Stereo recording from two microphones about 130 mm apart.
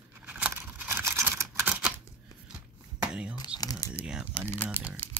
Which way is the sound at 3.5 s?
30° left (ahead or behind).